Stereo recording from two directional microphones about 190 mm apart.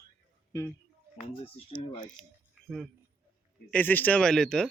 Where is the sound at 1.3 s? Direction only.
25° left (ahead or behind).